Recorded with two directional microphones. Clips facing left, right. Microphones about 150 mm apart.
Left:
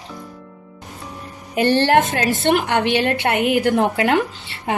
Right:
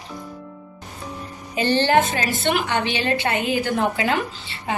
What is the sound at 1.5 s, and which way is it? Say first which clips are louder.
A woman's voice: left 3 dB; 65° left (ahead or behind).